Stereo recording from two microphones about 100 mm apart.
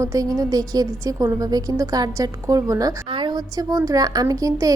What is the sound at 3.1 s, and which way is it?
A woman's voice, 50° right (ahead or behind).